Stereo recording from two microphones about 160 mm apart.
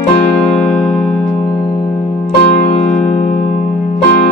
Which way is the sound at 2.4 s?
40° left (ahead or behind).